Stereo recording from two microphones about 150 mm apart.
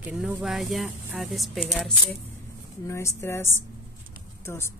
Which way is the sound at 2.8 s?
20° left (ahead or behind).